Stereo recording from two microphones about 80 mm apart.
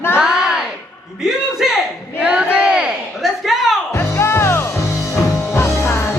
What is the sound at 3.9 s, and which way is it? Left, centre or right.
Music, left.